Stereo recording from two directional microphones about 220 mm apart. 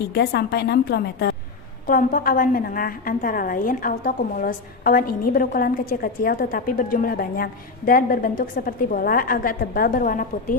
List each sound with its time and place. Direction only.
0.1 s a woman's voice: 45° left (ahead or behind)